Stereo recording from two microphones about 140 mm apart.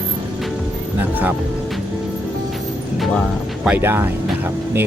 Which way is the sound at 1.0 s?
10° right (ahead or behind).